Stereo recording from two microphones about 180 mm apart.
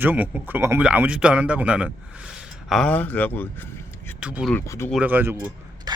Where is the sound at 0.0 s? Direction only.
10° right (ahead or behind); by 4.1 s 10° left (ahead or behind).